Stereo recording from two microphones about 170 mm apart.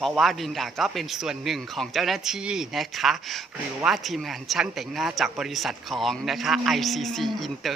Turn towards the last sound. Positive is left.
turn(degrees=0)  # may be behind; listen again after turning